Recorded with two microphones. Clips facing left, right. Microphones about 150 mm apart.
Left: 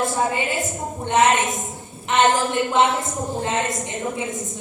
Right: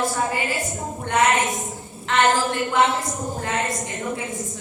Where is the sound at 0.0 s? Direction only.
20° left (ahead or behind).